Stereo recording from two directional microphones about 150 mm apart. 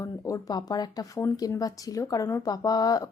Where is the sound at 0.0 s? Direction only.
25° left (ahead or behind).